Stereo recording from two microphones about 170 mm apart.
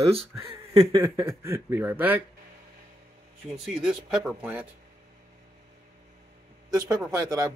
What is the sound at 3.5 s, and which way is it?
Speech, centre (ahead or behind).